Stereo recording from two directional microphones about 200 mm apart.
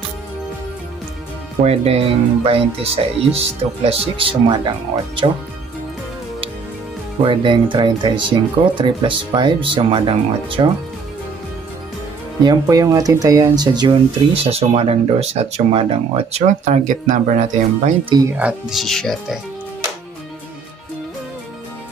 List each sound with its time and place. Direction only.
1.6 s speech: 30° right (ahead or behind)
7.2 s speech: 25° right (ahead or behind)
12.4 s speech: 15° right (ahead or behind); by 17.9 s 40° right (ahead or behind)
18.4 s speech: 5° right (ahead or behind)